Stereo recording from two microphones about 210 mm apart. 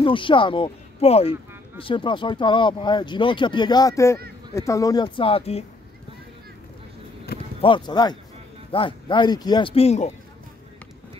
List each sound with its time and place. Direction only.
0.0 s speech: 25° left (ahead or behind)
7.6 s speech: 20° left (ahead or behind)